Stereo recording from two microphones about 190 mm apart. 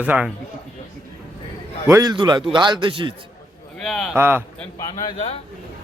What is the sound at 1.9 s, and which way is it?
Speech, 20° right (ahead or behind).